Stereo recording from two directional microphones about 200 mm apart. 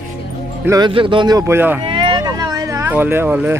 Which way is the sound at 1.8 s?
25° right (ahead or behind).